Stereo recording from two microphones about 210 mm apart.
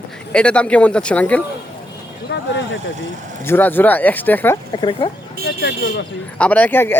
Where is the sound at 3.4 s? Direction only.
10° left (ahead or behind).